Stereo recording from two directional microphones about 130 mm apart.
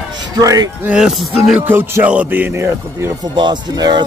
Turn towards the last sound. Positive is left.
turn(degrees=-35)  # may be behind; listen again after turning